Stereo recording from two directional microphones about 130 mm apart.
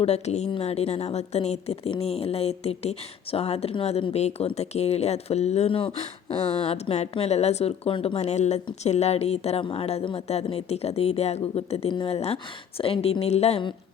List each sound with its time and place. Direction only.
0.0 s a woman's voice: 55° left (ahead or behind)